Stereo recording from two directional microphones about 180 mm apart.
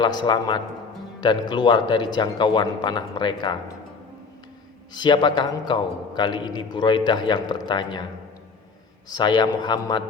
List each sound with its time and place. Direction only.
0.0 s a man's voice: 25° left (ahead or behind)
4.9 s a man's voice: 25° left (ahead or behind)
9.0 s a man's voice: 25° left (ahead or behind)